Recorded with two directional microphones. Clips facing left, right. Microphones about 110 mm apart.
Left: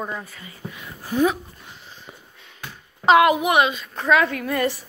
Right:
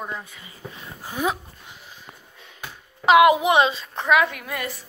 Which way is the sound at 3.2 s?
20° right (ahead or behind).